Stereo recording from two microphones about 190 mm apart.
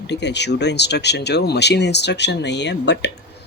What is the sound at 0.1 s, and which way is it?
Speech, 65° left (ahead or behind).